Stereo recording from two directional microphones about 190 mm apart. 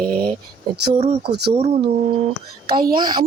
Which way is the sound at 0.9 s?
30° right (ahead or behind).